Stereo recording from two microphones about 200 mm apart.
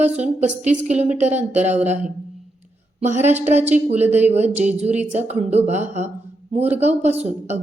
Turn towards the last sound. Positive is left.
turn(degrees=-35)  # may be behind; listen again after turning